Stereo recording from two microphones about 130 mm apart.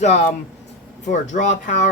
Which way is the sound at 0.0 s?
60° left (ahead or behind).